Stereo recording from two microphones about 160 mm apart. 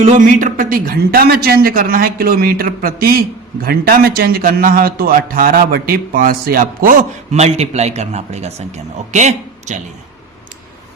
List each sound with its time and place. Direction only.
0.0 s a man's voice: 50° right (ahead or behind)